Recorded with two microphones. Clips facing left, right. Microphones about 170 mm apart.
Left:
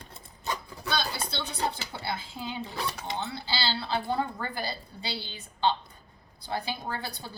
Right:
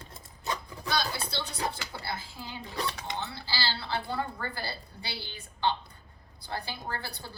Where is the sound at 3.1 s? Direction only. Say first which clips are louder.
Left 3 dB; 20° left (ahead or behind).